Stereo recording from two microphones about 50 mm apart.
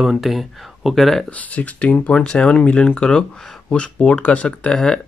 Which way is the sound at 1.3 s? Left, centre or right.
Left.